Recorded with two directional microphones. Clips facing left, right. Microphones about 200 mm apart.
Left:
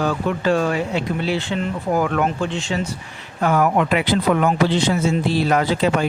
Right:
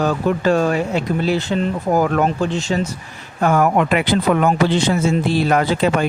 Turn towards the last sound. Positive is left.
turn(degrees=-55)  # may be behind; listen again after turning